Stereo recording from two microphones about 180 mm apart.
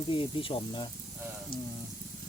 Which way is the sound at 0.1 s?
30° left (ahead or behind).